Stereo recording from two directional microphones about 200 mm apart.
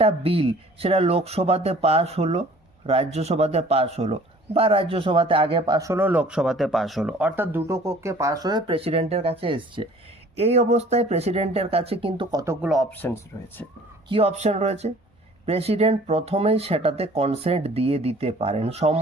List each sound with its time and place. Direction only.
0.0 s speech: 30° right (ahead or behind)
12.6 s speech: centre (ahead or behind)
12.9 s speech: 10° left (ahead or behind)
14.1 s speech: 30° right (ahead or behind)